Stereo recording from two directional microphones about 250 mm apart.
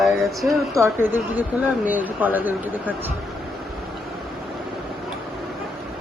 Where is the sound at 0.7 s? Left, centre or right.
Centre.